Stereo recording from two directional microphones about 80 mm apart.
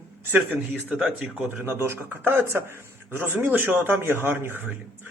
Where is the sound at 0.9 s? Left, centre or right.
Centre.